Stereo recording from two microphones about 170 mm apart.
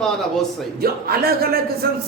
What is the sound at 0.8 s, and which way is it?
A woman's voice, 60° right (ahead or behind).